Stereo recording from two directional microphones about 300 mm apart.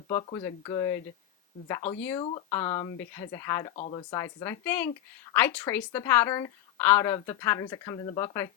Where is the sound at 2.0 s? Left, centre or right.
Centre.